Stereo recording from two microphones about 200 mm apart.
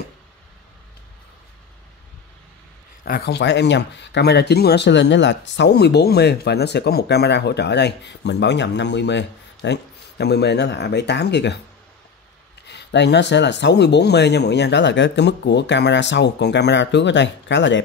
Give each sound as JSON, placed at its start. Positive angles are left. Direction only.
{"t": 3.1, "sound": "speech", "side_deg": 55}
{"t": 12.6, "sound": "speech", "side_deg": 60}